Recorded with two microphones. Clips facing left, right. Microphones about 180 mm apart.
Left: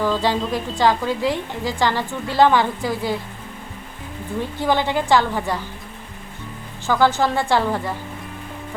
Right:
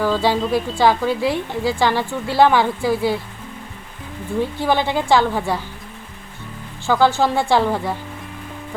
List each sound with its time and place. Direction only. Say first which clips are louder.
0.0 s a woman's voice: right 2 dB; 10° right (ahead or behind)
4.4 s a woman's voice: right 2 dB; 15° right (ahead or behind)
6.8 s a woman's voice: right 2 dB; 15° right (ahead or behind)